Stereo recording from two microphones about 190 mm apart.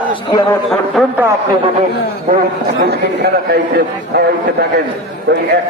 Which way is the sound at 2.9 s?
60° right (ahead or behind).